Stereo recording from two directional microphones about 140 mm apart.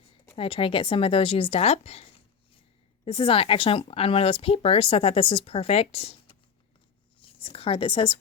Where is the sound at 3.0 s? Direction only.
40° left (ahead or behind).